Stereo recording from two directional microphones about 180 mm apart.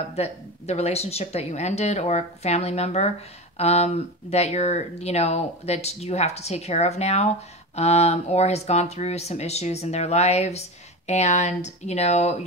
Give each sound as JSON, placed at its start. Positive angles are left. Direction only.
{"t": 0.1, "sound": "speech", "side_deg": 35}